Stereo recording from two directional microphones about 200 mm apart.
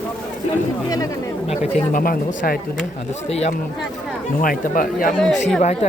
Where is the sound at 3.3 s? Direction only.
30° left (ahead or behind).